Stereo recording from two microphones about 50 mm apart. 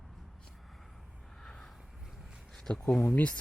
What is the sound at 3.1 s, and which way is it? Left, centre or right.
Speech, left.